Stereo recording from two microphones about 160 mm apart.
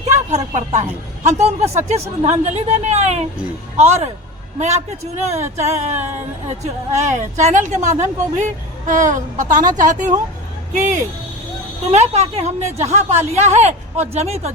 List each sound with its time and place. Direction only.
0.1 s a woman's voice: 45° right (ahead or behind)
5.2 s a woman's voice: 45° right (ahead or behind)
11.9 s a woman's voice: 45° right (ahead or behind)